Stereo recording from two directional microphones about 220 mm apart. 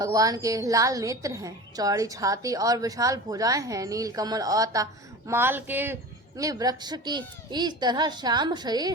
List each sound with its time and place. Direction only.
0.0 s a woman's voice: 15° right (ahead or behind)